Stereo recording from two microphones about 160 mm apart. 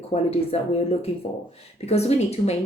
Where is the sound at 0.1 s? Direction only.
40° left (ahead or behind).